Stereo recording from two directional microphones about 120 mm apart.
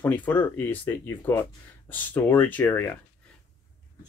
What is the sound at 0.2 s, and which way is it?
Speech, 15° left (ahead or behind).